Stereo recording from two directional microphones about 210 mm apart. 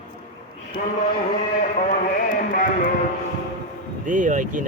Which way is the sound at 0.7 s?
35° left (ahead or behind).